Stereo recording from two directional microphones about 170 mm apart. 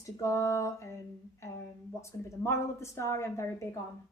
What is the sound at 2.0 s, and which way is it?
A woman's voice, 15° left (ahead or behind).